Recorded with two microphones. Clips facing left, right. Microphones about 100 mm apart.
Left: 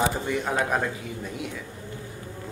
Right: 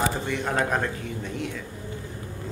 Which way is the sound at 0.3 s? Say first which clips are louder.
Even; 5° left (ahead or behind).